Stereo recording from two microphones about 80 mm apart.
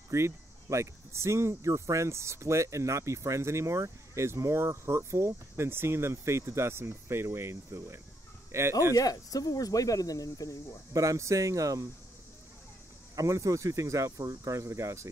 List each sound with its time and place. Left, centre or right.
0.1 s speech: right
8.9 s speech: left
10.9 s speech: right
13.1 s speech: right